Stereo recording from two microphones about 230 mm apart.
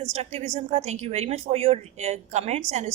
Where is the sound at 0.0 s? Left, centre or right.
Right.